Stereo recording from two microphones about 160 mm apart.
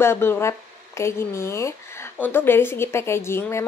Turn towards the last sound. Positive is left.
turn(degrees=15)  # may be behind; listen again after turning